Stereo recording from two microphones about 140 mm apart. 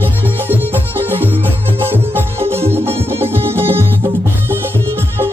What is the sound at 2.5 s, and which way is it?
Music, 45° right (ahead or behind).